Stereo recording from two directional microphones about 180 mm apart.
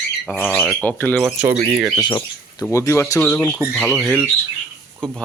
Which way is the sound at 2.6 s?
15° left (ahead or behind).